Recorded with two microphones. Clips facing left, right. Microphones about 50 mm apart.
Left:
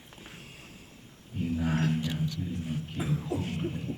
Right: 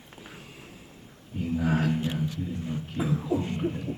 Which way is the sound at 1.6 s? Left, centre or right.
Centre.